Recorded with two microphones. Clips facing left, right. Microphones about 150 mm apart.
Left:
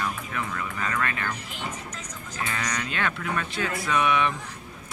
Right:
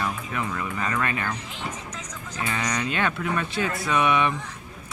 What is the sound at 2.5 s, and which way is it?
Speech, 10° right (ahead or behind).